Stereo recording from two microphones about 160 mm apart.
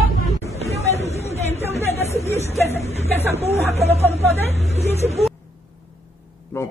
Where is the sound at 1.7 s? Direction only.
40° left (ahead or behind).